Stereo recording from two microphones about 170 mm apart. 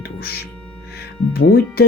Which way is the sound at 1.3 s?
65° left (ahead or behind).